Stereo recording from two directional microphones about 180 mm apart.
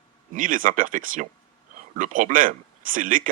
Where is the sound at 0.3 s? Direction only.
50° right (ahead or behind).